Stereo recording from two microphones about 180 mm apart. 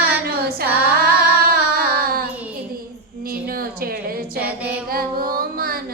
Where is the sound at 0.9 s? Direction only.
60° right (ahead or behind).